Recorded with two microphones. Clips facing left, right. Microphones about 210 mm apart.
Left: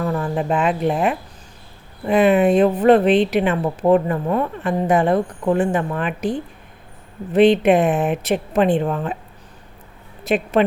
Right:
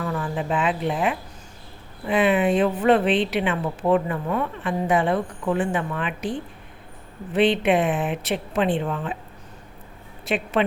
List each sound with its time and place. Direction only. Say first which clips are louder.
0.0 s speech: left 5 dB; 40° left (ahead or behind)
10.2 s speech: left 5 dB; 40° left (ahead or behind)